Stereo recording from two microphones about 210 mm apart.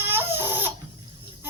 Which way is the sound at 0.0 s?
10° right (ahead or behind).